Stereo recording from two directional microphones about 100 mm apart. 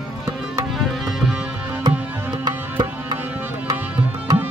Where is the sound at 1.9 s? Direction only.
40° right (ahead or behind).